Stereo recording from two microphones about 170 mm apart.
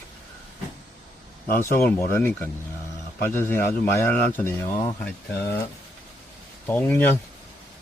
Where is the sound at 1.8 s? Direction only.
60° left (ahead or behind).